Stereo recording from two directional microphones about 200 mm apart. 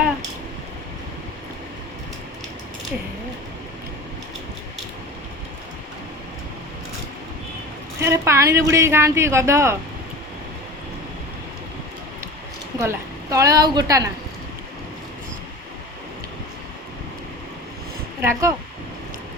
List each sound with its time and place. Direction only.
7.9 s a woman's voice: 15° right (ahead or behind)
12.8 s a woman's voice: 15° right (ahead or behind)
18.2 s speech: 15° right (ahead or behind)